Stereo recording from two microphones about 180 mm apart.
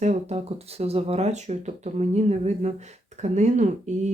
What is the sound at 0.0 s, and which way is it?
Speech, 40° right (ahead or behind).